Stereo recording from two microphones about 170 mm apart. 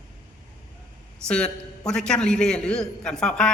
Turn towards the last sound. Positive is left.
turn(degrees=5)  # may be behind; listen again after turning